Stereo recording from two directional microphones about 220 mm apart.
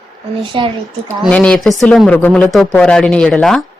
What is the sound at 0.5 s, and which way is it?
Speech, 20° right (ahead or behind).